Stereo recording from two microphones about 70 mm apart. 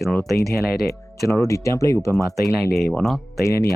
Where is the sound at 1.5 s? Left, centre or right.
Left.